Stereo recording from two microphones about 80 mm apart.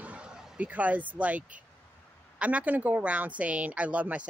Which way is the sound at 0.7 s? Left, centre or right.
Centre.